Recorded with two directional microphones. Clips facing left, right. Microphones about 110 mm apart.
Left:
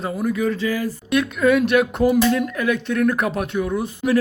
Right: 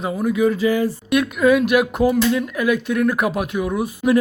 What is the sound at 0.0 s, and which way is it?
Speech, 5° right (ahead or behind).